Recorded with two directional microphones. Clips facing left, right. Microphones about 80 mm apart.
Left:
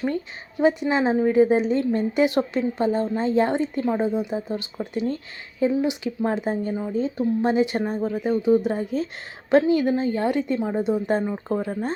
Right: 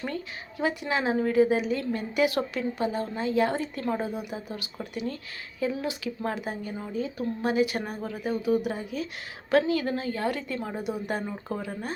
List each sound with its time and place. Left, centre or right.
0.6 s a woman's voice: left